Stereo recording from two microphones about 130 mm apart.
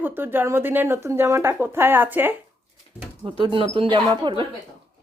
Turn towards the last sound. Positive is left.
turn(degrees=-35)  # may be behind; listen again after turning